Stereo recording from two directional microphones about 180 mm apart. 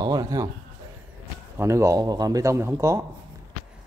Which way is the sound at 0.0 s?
20° right (ahead or behind).